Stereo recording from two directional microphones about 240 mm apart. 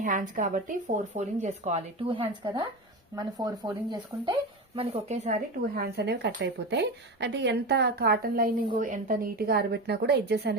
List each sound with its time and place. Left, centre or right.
0.0 s a woman's voice: right